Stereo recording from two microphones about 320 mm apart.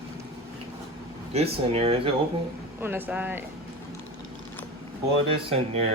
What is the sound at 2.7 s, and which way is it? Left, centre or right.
Speech, centre.